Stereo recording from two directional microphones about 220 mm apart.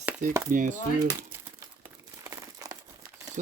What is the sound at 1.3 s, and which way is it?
Crumpling, 10° right (ahead or behind).